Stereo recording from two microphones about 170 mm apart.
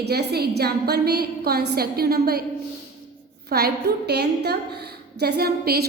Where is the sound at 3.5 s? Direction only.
70° right (ahead or behind).